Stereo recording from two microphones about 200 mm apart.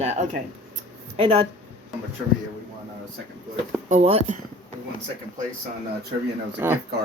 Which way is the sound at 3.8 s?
35° right (ahead or behind).